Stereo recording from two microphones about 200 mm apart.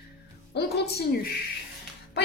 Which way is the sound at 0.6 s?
55° left (ahead or behind).